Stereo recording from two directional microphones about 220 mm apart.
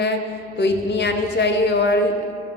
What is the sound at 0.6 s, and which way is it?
Speech, 50° left (ahead or behind).